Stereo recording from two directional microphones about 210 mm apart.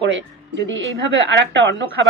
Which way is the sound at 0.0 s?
60° right (ahead or behind).